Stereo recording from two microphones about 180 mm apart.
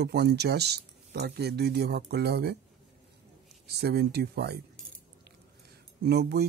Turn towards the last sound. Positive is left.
turn(degrees=-65)  # may be behind; listen again after turning